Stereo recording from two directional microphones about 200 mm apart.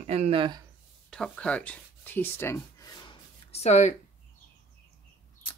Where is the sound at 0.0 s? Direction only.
30° right (ahead or behind).